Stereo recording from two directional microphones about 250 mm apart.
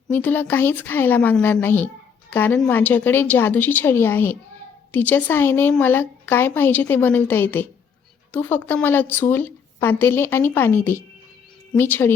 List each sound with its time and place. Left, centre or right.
0.1 s speech: centre